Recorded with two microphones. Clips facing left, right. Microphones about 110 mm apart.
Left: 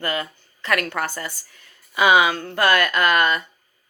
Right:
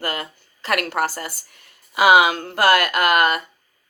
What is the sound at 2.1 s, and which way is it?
Speech, 45° right (ahead or behind).